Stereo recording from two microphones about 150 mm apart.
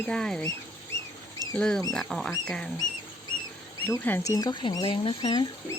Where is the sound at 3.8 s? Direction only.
15° left (ahead or behind).